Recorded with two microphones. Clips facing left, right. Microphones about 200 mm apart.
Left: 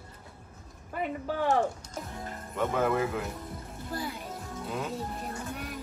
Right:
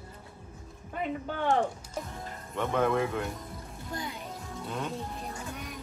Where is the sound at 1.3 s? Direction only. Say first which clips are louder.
Left 1 dB; 5° left (ahead or behind).